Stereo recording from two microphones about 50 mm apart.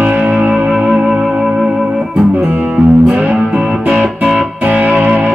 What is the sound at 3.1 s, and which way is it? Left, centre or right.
Music, right.